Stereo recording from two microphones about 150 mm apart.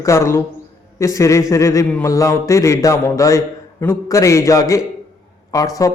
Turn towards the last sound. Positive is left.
turn(degrees=25)  # may be behind; listen again after turning